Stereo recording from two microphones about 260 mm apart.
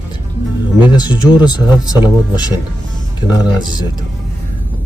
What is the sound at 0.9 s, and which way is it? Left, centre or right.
Speech, centre.